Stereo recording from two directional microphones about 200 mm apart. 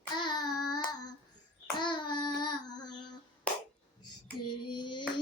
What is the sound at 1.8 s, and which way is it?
Child singing, 20° left (ahead or behind).